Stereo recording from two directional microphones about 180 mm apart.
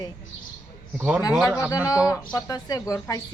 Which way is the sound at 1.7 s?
20° left (ahead or behind).